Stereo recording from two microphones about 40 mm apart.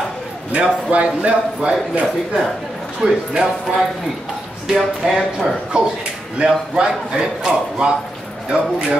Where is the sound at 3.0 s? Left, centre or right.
Right.